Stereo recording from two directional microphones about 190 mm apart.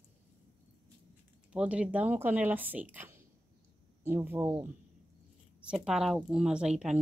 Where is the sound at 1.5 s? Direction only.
5° right (ahead or behind).